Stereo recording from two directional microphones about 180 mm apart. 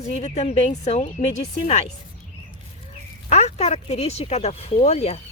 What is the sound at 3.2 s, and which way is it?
Speech, 35° left (ahead or behind).